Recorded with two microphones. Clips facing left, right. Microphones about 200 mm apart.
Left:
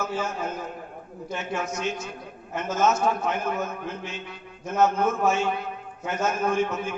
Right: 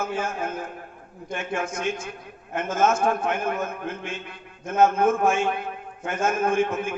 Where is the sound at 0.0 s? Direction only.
50° right (ahead or behind).